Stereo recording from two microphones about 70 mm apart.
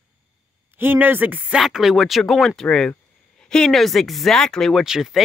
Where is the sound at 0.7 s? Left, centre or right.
Right.